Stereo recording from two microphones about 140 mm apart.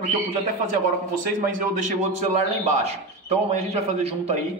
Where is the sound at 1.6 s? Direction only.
60° right (ahead or behind).